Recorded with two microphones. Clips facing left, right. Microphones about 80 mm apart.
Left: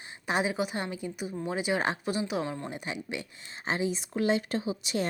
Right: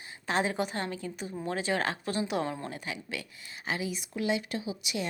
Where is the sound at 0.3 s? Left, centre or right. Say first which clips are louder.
Left 1 dB; centre.